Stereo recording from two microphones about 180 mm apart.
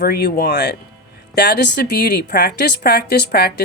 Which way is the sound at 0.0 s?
60° left (ahead or behind).